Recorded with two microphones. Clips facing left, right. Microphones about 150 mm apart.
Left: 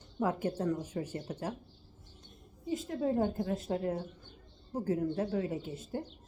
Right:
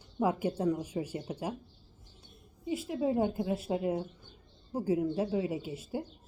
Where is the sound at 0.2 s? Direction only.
10° right (ahead or behind).